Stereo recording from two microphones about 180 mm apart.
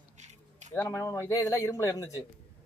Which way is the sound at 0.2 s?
40° right (ahead or behind).